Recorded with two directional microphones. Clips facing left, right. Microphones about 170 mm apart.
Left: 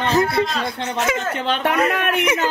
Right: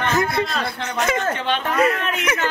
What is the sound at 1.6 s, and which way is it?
Speech, 70° left (ahead or behind).